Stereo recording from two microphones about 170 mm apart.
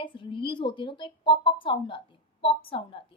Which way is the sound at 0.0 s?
30° left (ahead or behind).